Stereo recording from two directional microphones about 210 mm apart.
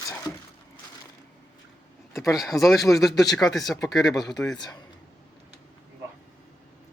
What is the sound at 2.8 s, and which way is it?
Speech, 15° left (ahead or behind).